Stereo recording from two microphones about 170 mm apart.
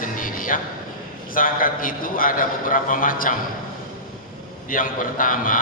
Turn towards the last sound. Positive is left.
turn(degrees=55)  # may be behind; listen again after turning